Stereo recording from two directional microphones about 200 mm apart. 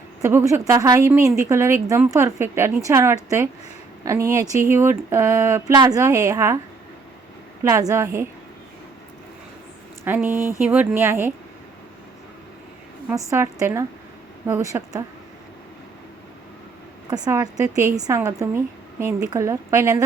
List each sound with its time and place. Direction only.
0.2 s a woman's voice: 10° right (ahead or behind)
7.6 s a woman's voice: 15° right (ahead or behind)
10.0 s a woman's voice: 10° right (ahead or behind)
13.1 s a woman's voice: 15° right (ahead or behind)
17.1 s a woman's voice: 20° right (ahead or behind)